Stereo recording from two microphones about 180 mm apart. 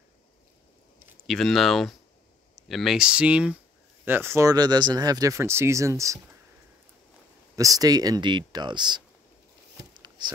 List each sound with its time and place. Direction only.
1.2 s speech: centre (ahead or behind); by 6.1 s 15° right (ahead or behind)
7.5 s speech: 20° right (ahead or behind)
9.9 s a sound: 25° right (ahead or behind)